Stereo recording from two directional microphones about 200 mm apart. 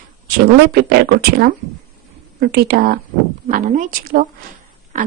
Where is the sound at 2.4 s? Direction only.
50° right (ahead or behind).